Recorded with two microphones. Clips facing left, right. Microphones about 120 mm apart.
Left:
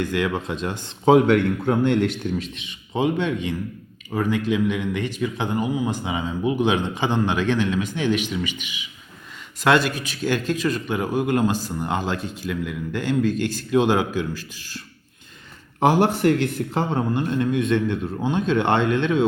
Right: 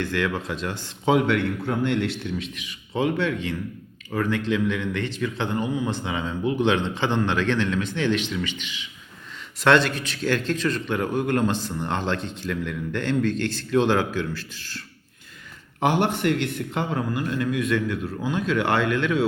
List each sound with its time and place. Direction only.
0.0 s a man's voice: 15° left (ahead or behind)
1.0 s a man's voice: 45° left (ahead or behind)
2.6 s a man's voice: 20° left (ahead or behind)
15.8 s a man's voice: 40° left (ahead or behind)